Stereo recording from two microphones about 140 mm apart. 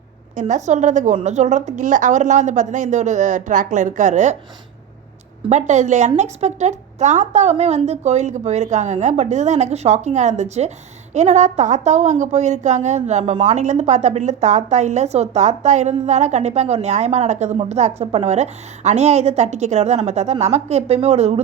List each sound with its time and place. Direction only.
0.3 s a woman's voice: 60° right (ahead or behind)
5.5 s a woman's voice: 55° right (ahead or behind)